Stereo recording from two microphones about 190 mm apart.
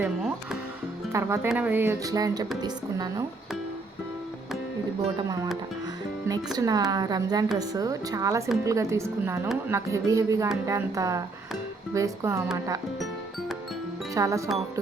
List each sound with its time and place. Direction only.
0.0 s speech: 5° right (ahead or behind); by 3.2 s 20° right (ahead or behind)
5.0 s speech: 25° right (ahead or behind)
14.1 s speech: 15° right (ahead or behind)